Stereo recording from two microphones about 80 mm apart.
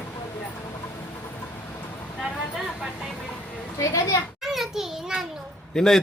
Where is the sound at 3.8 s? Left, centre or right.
Left.